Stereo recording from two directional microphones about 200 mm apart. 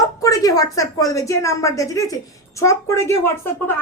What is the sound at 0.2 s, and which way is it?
A woman's voice, 15° left (ahead or behind).